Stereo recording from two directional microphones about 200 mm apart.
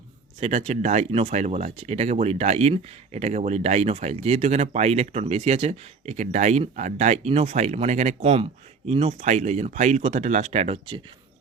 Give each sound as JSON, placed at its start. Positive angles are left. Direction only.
{"t": 0.3, "sound": "speech", "side_deg": -30}